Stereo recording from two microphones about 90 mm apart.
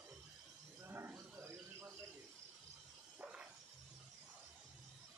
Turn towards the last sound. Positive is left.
turn(degrees=-15)  # may be behind; listen again after turning